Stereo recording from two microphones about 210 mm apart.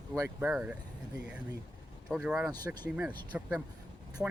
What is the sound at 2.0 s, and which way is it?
Speech, 5° right (ahead or behind).